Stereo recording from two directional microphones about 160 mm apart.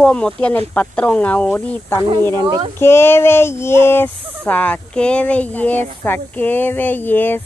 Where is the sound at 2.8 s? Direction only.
15° left (ahead or behind).